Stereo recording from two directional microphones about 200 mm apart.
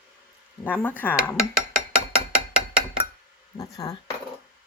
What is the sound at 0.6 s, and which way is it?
Speech, 10° left (ahead or behind).